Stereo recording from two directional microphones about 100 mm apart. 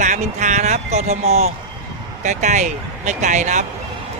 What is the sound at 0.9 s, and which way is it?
Speech, 90° right.